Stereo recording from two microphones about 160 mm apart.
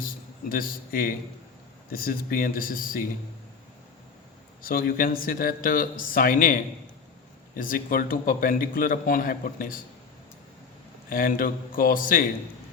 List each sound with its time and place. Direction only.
0.0 s a man's voice: 65° left (ahead or behind)
4.6 s a man's voice: 65° left (ahead or behind)
11.1 s a man's voice: 60° left (ahead or behind)